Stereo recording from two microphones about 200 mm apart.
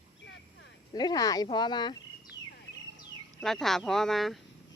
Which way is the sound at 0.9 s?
20° left (ahead or behind).